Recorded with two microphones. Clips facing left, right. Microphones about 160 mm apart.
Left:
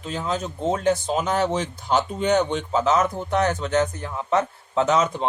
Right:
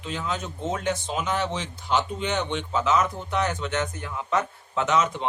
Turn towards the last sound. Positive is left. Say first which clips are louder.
# left 3 dB
turn(degrees=35)  # may be behind; listen again after turning